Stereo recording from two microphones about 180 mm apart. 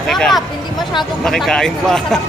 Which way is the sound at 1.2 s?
5° left (ahead or behind).